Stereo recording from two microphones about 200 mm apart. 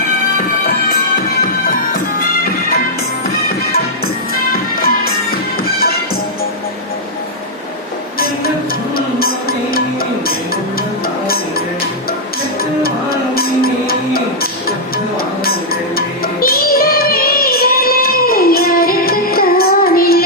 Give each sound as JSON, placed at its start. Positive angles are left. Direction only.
{"t": 1.4, "sound": "music", "side_deg": 45}
{"t": 9.0, "sound": "music", "side_deg": 50}
{"t": 12.8, "sound": "music", "side_deg": 50}
{"t": 15.4, "sound": "music", "side_deg": 50}